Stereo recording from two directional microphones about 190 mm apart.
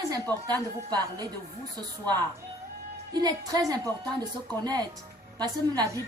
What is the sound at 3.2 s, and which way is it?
A woman's voice, 20° right (ahead or behind).